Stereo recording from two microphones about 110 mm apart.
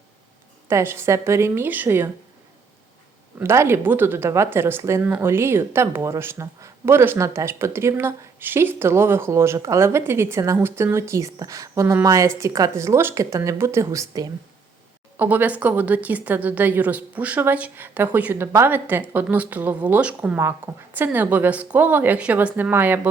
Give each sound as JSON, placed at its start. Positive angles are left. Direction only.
{"t": 0.7, "sound": "speech", "side_deg": -25}
{"t": 3.3, "sound": "speech", "side_deg": -25}
{"t": 15.2, "sound": "a woman's voice", "side_deg": -15}
{"t": 20.4, "sound": "a woman's voice", "side_deg": -20}